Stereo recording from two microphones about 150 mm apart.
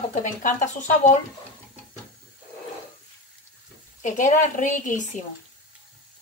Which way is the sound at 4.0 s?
55° left (ahead or behind).